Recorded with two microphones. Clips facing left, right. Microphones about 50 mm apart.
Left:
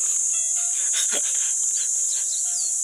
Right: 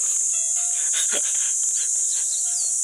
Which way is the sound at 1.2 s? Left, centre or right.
Centre.